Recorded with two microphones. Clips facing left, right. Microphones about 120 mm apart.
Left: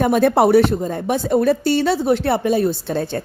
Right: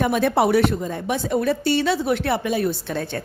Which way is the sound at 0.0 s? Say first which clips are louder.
Left 4 dB; 40° left (ahead or behind).